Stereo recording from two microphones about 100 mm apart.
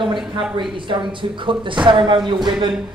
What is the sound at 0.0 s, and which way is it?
Speech, 55° right (ahead or behind).